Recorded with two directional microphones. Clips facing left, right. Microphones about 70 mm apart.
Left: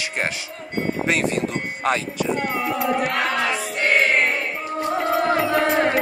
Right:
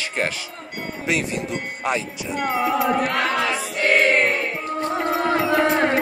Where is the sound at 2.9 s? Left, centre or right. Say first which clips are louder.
Right 1 dB; centre.